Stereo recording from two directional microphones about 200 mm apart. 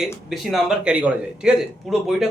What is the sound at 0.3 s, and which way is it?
Speech, centre (ahead or behind).